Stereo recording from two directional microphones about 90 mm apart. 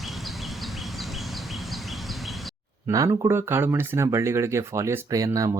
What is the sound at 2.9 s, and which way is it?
Speech, 40° right (ahead or behind).